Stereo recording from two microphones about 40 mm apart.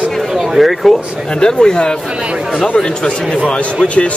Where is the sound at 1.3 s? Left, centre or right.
Left.